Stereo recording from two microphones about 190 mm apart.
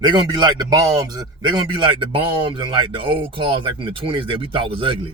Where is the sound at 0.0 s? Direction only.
25° right (ahead or behind).